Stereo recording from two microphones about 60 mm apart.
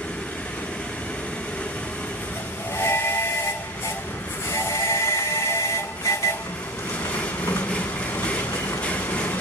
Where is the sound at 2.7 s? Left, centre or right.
Left.